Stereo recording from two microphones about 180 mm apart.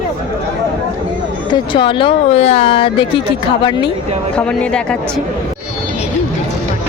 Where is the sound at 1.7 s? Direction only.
30° left (ahead or behind).